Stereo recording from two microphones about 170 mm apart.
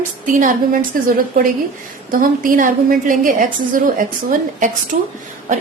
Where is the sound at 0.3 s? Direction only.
50° right (ahead or behind).